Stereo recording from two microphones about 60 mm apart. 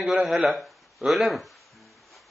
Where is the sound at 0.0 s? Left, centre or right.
Centre.